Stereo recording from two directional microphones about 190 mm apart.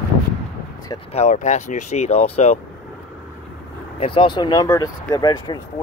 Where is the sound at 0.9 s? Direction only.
35° left (ahead or behind).